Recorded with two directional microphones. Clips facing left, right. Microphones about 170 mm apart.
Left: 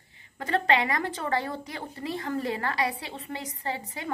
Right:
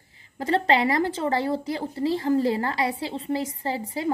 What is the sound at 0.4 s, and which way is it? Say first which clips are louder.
A woman's voice: right 4 dB; 30° right (ahead or behind).